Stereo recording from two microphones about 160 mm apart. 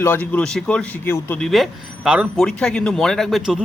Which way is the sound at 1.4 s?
Centre (ahead or behind).